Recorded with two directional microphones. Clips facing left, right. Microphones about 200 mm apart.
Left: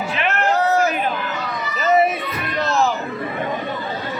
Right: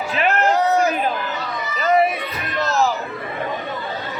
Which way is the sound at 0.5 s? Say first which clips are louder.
Left 3 dB; 15° right (ahead or behind).